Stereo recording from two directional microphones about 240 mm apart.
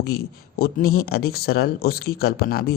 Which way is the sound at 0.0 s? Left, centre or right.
Left.